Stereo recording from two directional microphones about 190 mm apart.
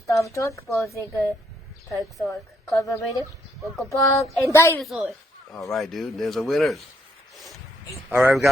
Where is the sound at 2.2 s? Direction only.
Centre (ahead or behind).